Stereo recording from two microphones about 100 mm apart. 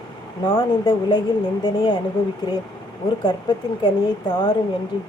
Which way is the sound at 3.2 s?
55° left (ahead or behind).